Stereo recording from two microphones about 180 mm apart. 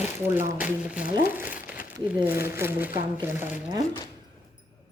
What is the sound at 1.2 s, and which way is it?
Crumpling, 10° right (ahead or behind).